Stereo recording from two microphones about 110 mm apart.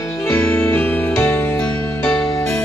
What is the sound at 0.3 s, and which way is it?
Music, 15° left (ahead or behind).